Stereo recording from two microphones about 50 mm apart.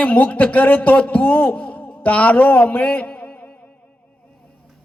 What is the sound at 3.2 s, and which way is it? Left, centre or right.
Music, left.